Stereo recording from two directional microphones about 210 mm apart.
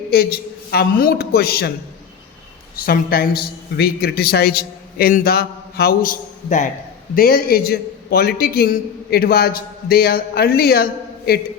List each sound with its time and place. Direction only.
0.7 s a man's voice: 45° left (ahead or behind)
2.7 s a man's voice: 45° left (ahead or behind)